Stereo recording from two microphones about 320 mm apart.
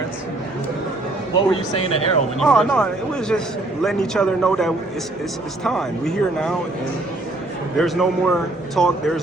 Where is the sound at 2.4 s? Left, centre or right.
Centre.